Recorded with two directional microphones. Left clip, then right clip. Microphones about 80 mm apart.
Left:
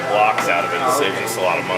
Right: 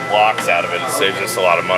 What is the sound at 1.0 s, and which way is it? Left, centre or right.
Speech, right.